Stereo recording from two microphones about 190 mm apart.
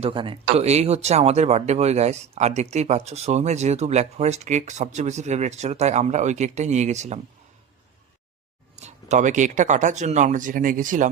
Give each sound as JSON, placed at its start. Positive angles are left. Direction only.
{"t": 0.0, "sound": "a man's voice", "side_deg": -25}
{"t": 8.7, "sound": "speech", "side_deg": -35}